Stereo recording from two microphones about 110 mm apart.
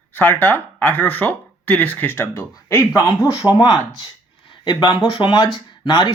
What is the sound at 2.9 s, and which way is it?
Speech, 15° right (ahead or behind).